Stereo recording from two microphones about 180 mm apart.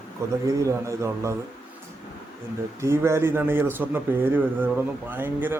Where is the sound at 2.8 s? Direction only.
15° right (ahead or behind).